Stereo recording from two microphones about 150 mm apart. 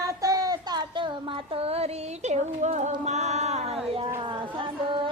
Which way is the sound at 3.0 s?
50° right (ahead or behind).